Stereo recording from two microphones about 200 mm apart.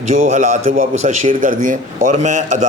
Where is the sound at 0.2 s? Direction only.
40° right (ahead or behind).